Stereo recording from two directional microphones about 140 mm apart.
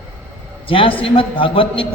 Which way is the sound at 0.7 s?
40° left (ahead or behind).